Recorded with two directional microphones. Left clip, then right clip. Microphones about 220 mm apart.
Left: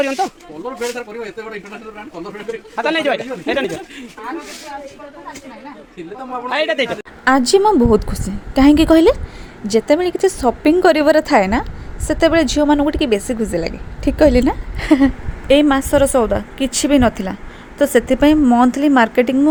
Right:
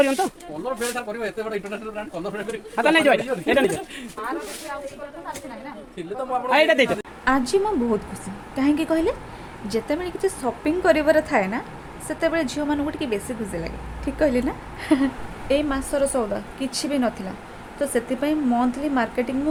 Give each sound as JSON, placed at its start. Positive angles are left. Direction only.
{"t": 0.0, "sound": "a woman's voice", "side_deg": -10}
{"t": 2.7, "sound": "a man's voice", "side_deg": -10}
{"t": 6.5, "sound": "a woman's voice", "side_deg": -10}
{"t": 7.3, "sound": "speech", "side_deg": 35}